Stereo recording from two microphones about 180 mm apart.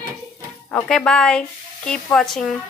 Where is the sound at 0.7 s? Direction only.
5° left (ahead or behind).